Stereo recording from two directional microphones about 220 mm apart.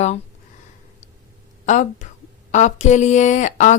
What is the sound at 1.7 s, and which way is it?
A woman's voice, 35° left (ahead or behind).